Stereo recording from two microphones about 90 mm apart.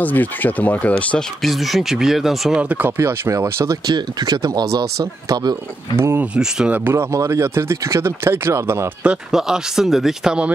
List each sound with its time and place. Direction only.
0.0 s speech: 20° left (ahead or behind)
1.4 s speech: centre (ahead or behind)
3.0 s speech: 35° right (ahead or behind)
3.8 s speech: 50° right (ahead or behind)
5.9 s speech: 30° right (ahead or behind)
6.3 s speech: 10° right (ahead or behind)
6.9 s speech: 30° right (ahead or behind)
9.0 s speech: 10° right (ahead or behind)